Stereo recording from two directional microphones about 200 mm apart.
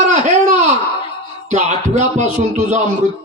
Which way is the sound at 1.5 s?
35° right (ahead or behind).